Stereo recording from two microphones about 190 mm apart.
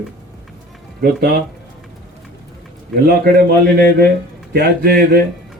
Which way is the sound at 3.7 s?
55° right (ahead or behind).